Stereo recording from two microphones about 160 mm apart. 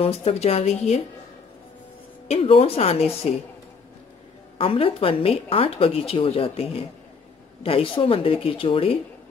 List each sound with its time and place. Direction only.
0.0 s a woman's voice: 40° left (ahead or behind)
2.2 s a woman's voice: 35° left (ahead or behind)
4.6 s a woman's voice: 35° left (ahead or behind)